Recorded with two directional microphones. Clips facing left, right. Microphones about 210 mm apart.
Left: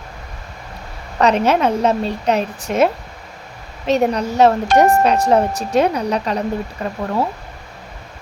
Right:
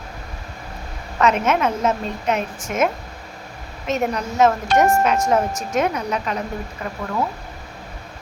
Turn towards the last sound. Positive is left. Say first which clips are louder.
# left 5 dB
turn(degrees=35)  # may be behind; listen again after turning